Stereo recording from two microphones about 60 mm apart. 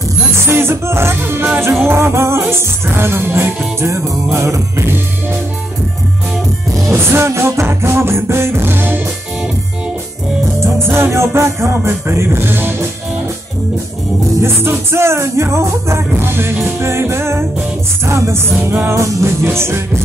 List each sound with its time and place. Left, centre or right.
0.5 s music: right
6.8 s music: right
10.6 s music: right
14.4 s music: right
18.7 s music: right
18.9 s music: right
19.4 s music: right